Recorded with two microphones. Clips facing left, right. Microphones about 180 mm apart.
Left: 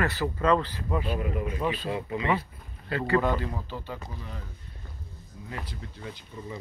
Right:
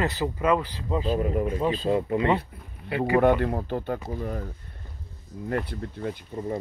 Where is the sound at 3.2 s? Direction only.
60° right (ahead or behind).